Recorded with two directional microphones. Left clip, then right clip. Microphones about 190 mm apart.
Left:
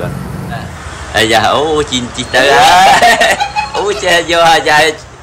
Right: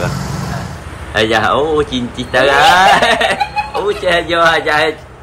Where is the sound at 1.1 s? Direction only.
Centre (ahead or behind).